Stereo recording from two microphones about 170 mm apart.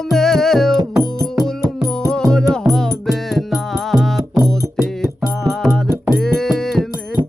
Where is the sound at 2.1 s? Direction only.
5° left (ahead or behind).